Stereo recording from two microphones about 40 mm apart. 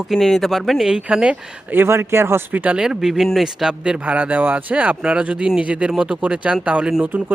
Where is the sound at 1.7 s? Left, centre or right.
Right.